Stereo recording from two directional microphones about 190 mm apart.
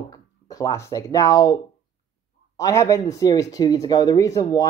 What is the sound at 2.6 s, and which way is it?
Speech, 15° left (ahead or behind).